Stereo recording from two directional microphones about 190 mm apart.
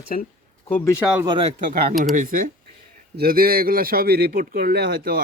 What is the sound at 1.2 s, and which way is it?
Speech, 25° right (ahead or behind).